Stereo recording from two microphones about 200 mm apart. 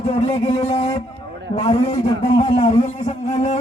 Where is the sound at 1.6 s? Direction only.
30° left (ahead or behind).